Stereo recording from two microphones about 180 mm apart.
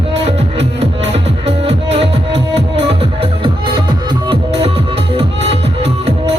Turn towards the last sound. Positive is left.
turn(degrees=-35)  # may be behind; listen again after turning